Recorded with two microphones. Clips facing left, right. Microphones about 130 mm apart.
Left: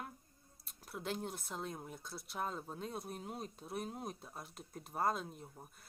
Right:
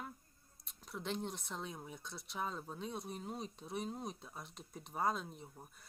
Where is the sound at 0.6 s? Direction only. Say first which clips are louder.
Even; 5° left (ahead or behind).